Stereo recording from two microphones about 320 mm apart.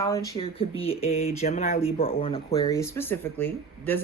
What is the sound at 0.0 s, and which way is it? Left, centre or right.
Speech, centre.